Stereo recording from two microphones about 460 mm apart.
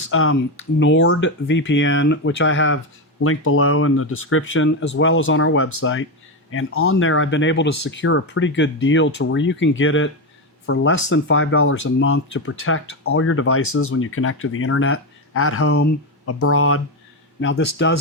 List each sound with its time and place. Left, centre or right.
0.1 s speech: left